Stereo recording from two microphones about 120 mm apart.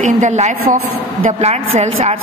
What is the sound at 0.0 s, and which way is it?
Speech, 85° right.